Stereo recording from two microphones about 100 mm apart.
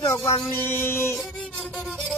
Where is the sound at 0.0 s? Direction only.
35° left (ahead or behind).